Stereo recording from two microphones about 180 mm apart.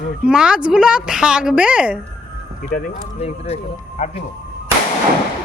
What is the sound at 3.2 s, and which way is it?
Speech, 35° left (ahead or behind).